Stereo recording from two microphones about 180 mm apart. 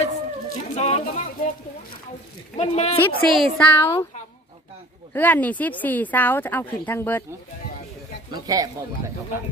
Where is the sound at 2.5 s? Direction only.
40° left (ahead or behind).